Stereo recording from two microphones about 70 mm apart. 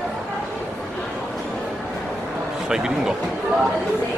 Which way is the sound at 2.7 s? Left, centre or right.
Centre.